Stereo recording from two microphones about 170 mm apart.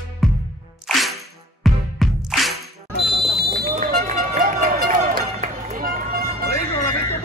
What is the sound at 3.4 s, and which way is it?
Run, 65° right (ahead or behind).